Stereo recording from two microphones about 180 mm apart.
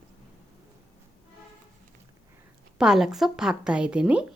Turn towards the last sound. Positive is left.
turn(degrees=-5)  # may be behind; listen again after turning